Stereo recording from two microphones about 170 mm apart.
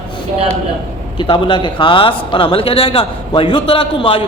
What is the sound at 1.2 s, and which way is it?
A man's voice, 30° left (ahead or behind).